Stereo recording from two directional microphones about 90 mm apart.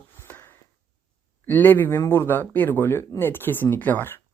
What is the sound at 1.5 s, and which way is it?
Speech, 20° left (ahead or behind).